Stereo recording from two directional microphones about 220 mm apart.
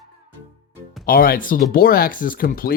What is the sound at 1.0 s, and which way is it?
Speech, 40° left (ahead or behind).